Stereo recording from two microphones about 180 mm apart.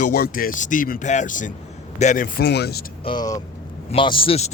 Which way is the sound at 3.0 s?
25° left (ahead or behind).